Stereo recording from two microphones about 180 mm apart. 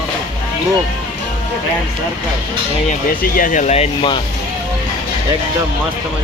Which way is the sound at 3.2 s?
50° left (ahead or behind).